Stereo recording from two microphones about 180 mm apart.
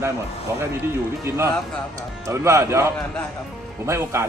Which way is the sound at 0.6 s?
15° right (ahead or behind).